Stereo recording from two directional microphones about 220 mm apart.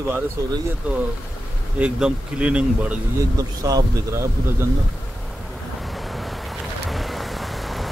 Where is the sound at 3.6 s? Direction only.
15° right (ahead or behind).